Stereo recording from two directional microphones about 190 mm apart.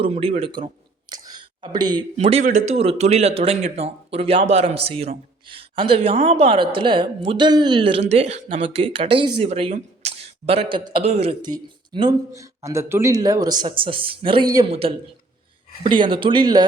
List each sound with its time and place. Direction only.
0.0 s a man's voice: 30° right (ahead or behind)
1.3 s a sound: 25° right (ahead or behind)
2.1 s a man's voice: 30° right (ahead or behind)